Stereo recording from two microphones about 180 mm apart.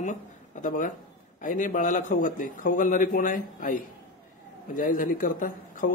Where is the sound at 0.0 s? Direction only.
45° left (ahead or behind).